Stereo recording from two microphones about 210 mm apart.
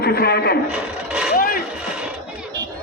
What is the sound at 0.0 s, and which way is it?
Speech, 50° left (ahead or behind).